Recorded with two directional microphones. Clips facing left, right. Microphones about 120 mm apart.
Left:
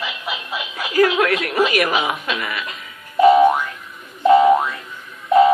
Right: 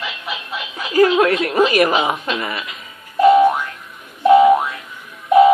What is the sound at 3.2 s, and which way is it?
Boing, 5° left (ahead or behind).